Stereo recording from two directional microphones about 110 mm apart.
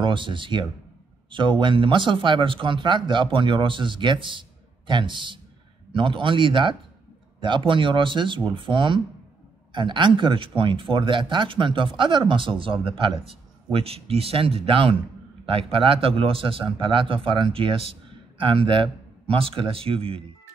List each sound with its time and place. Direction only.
0.0 s a man's voice: 50° right (ahead or behind)